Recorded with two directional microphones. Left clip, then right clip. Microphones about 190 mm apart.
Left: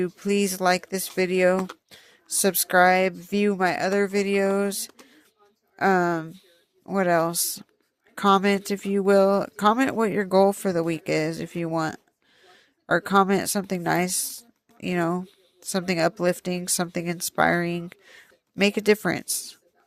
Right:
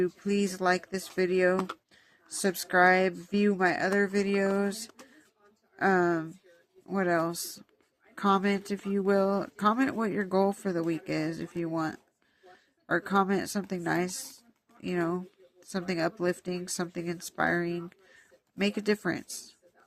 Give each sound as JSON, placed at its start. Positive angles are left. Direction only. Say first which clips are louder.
{"t": 0.0, "sound": "speech", "louder": "left 5 dB", "side_deg": 50}
{"t": 1.5, "sound": "speech", "louder": "left 4 dB", "side_deg": 15}
{"t": 1.9, "sound": "speech", "louder": "left 10 dB", "side_deg": 50}